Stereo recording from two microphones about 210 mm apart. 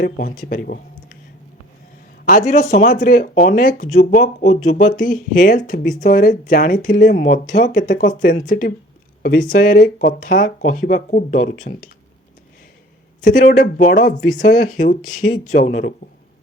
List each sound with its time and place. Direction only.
0.0 s speech: 45° left (ahead or behind)
2.2 s speech: 35° left (ahead or behind)
13.2 s speech: 40° left (ahead or behind)